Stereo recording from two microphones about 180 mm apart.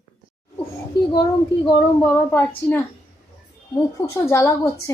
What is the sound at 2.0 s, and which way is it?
Speech, 10° left (ahead or behind).